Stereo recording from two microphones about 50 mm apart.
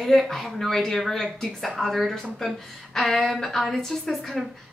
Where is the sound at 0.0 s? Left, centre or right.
Centre.